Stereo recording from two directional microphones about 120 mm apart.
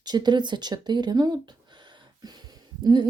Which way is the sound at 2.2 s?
35° right (ahead or behind).